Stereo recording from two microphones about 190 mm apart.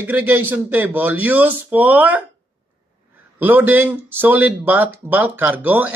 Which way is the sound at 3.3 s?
10° right (ahead or behind).